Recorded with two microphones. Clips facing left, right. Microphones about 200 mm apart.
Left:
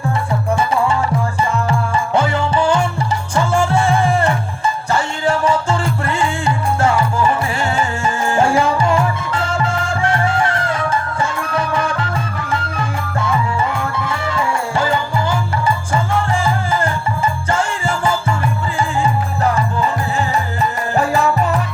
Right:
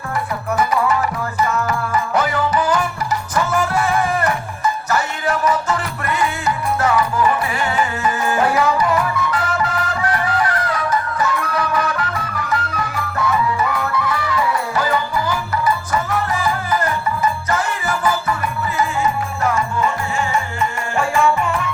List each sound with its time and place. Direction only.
0.5 s music: 25° left (ahead or behind)